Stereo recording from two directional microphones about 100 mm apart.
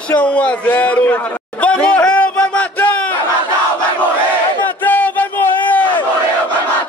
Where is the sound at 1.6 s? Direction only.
10° left (ahead or behind).